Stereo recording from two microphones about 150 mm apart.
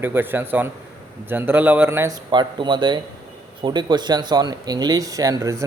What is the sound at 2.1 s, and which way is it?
Speech, 30° right (ahead or behind).